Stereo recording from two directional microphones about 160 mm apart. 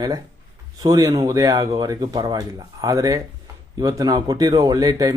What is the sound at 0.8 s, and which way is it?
Speech, 25° right (ahead or behind).